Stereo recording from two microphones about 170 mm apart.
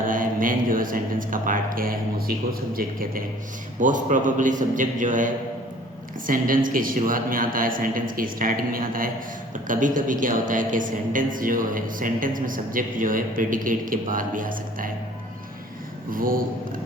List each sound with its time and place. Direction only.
0.1 s a man's voice: 55° right (ahead or behind)
3.8 s a woman's voice: 50° right (ahead or behind)
16.1 s a man's voice: 55° right (ahead or behind)